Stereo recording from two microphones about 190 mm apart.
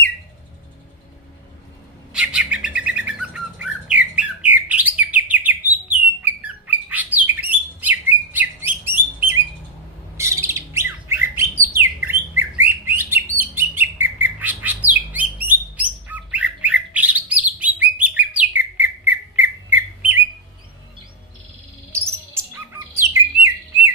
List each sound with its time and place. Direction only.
2.1 s bird: 5° right (ahead or behind)
21.9 s bird: 15° right (ahead or behind)